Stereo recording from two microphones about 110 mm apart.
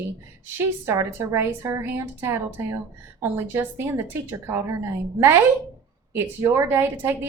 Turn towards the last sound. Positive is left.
turn(degrees=-20)  # may be behind; listen again after turning